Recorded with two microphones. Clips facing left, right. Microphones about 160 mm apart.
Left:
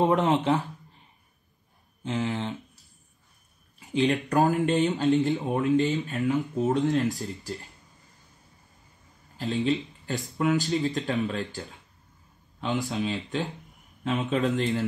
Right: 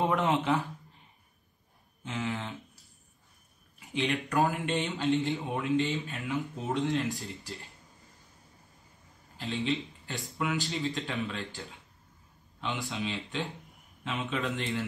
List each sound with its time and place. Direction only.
0.0 s speech: 35° left (ahead or behind)
2.0 s speech: 35° left (ahead or behind)
3.9 s speech: 35° left (ahead or behind)
9.4 s speech: 40° left (ahead or behind)